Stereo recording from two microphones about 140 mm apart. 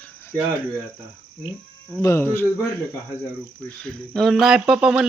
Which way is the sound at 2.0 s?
20° left (ahead or behind).